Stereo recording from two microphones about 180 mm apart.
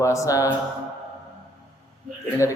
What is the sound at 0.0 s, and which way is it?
Speech, 15° left (ahead or behind).